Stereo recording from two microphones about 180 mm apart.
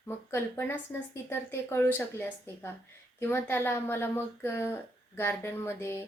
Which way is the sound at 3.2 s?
15° left (ahead or behind).